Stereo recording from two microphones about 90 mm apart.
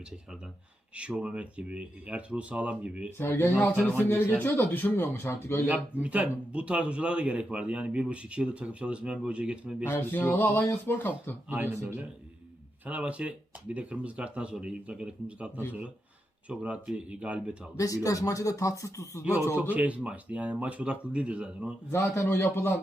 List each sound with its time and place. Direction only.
0.9 s a man's voice: 15° right (ahead or behind)
3.2 s speech: 25° left (ahead or behind)
5.6 s a man's voice: 15° right (ahead or behind)
9.8 s speech: 25° left (ahead or behind)
11.4 s a man's voice: 20° right (ahead or behind)
17.7 s speech: 40° left (ahead or behind)
19.5 s a man's voice: 15° right (ahead or behind)
21.9 s speech: 30° left (ahead or behind)